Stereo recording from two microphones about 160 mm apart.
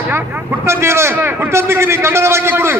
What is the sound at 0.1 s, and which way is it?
A man's voice, 15° right (ahead or behind).